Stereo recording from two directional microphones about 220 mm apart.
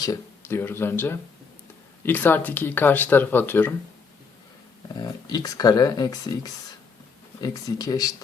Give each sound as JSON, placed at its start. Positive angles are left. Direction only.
{"t": 0.0, "sound": "speech", "side_deg": 15}
{"t": 4.9, "sound": "speech", "side_deg": 20}